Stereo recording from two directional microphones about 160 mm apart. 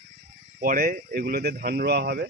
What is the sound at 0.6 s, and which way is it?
Speech, 60° right (ahead or behind).